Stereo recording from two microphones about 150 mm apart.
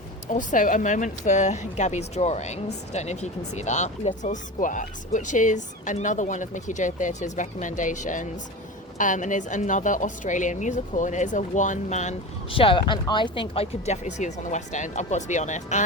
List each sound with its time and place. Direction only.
0.3 s speech: 60° left (ahead or behind)
12.5 s speech: 35° left (ahead or behind); by 15.8 s 55° left (ahead or behind)